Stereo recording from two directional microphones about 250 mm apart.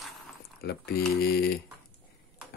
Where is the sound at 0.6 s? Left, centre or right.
Left.